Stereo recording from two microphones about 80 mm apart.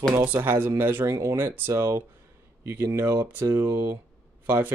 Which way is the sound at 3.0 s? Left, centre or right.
Right.